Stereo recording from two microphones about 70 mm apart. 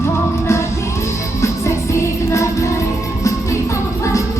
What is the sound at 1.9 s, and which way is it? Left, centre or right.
Music, left.